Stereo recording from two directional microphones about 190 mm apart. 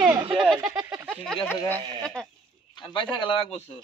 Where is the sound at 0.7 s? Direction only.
10° right (ahead or behind).